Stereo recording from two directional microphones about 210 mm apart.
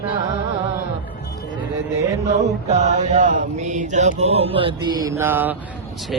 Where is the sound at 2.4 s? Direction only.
35° right (ahead or behind).